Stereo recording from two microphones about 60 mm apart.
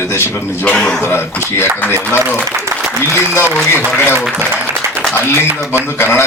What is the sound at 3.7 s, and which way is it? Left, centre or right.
Speech, left.